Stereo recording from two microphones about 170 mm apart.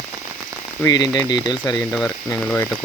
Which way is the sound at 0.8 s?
20° left (ahead or behind).